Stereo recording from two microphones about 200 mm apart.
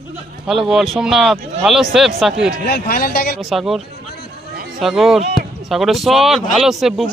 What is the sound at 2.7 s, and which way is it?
Speech, 50° left (ahead or behind).